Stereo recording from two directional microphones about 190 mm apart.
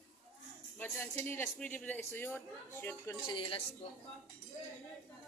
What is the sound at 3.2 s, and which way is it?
Speech, 25° left (ahead or behind).